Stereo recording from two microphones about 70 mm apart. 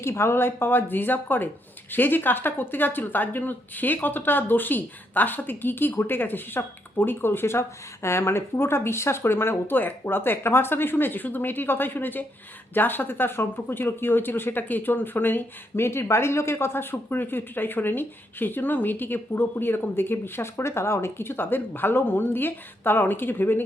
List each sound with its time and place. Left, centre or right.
0.0 s speech: left